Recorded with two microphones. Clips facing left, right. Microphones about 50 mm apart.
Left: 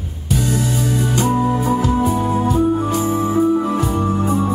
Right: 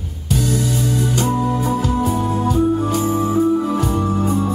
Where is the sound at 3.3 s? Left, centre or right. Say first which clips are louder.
Left 1 dB; centre.